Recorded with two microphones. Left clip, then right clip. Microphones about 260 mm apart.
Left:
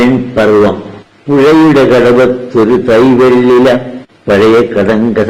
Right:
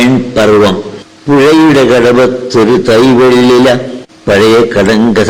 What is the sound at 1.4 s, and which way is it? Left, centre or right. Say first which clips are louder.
A man's voice: even; right.